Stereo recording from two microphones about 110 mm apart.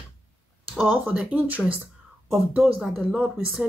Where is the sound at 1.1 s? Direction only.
10° right (ahead or behind).